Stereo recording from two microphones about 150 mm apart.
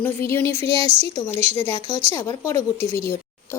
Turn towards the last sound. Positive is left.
turn(degrees=-40)  # may be behind; listen again after turning